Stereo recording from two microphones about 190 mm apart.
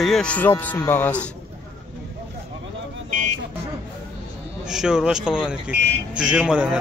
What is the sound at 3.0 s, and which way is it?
Vehicle, 40° right (ahead or behind).